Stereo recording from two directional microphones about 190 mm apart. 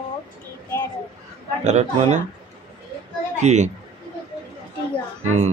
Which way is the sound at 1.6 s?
35° right (ahead or behind).